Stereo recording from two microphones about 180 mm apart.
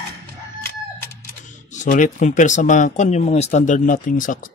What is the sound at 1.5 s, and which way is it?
Speech, 45° left (ahead or behind).